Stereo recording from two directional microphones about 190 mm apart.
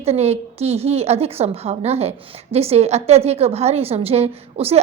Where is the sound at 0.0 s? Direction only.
35° right (ahead or behind).